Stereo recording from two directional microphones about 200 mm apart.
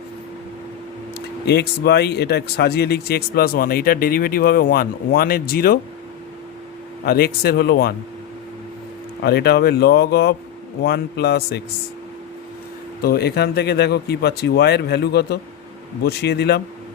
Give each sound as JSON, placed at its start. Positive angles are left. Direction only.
{"t": 1.5, "sound": "speech", "side_deg": 55}
{"t": 7.0, "sound": "speech", "side_deg": 50}
{"t": 9.2, "sound": "speech", "side_deg": 55}
{"t": 13.0, "sound": "speech", "side_deg": 50}